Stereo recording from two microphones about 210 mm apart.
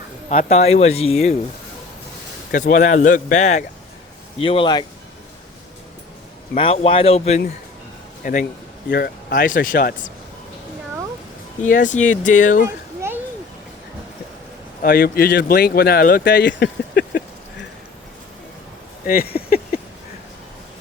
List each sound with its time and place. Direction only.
0.3 s speech: 30° left (ahead or behind)
2.5 s speech: 40° left (ahead or behind)
4.4 s speech: 25° left (ahead or behind)
6.5 s speech: 30° left (ahead or behind)
11.6 s speech: 35° left (ahead or behind)
14.8 s speech: 45° left (ahead or behind)
19.0 s speech: 45° left (ahead or behind)